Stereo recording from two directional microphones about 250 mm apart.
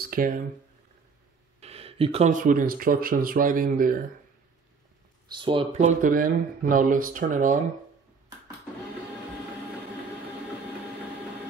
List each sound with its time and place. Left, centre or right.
0.0 s a sound: right
1.6 s speech: right
5.3 s speech: centre
6.0 s speech: right